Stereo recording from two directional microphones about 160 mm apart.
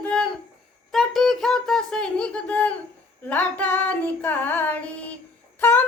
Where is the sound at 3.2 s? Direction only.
10° left (ahead or behind).